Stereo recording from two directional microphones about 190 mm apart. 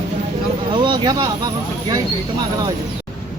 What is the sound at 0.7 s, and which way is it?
Speech, 25° right (ahead or behind).